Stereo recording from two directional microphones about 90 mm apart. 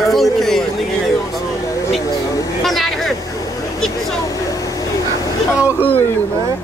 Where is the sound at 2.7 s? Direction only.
Centre (ahead or behind).